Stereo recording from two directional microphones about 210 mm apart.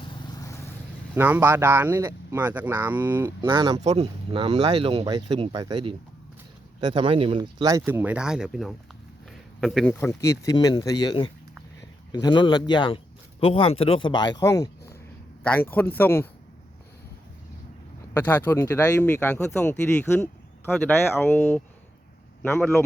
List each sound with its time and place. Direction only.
0.0 s vehicle: 20° left (ahead or behind)
1.1 s speech: 10° right (ahead or behind)
3.8 s speech: 30° right (ahead or behind); by 16.3 s 10° left (ahead or behind)
18.1 s speech: 10° left (ahead or behind)